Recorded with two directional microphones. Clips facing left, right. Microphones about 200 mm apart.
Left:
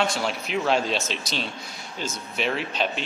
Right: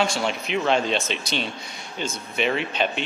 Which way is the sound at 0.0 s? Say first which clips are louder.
Right 2 dB; centre (ahead or behind).